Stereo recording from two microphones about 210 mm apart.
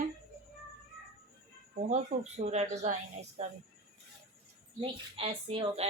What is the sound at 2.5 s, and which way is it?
Speech, 30° right (ahead or behind).